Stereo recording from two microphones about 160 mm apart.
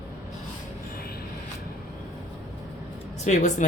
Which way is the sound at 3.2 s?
50° left (ahead or behind).